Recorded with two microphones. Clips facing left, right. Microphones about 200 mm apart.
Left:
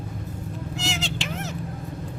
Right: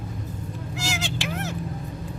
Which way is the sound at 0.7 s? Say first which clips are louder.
Right 1 dB; centre (ahead or behind).